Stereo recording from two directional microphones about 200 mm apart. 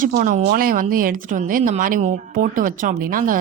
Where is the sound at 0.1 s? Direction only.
45° right (ahead or behind).